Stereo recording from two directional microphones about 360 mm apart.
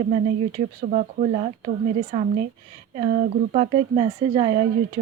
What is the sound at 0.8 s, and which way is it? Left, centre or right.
Speech, centre.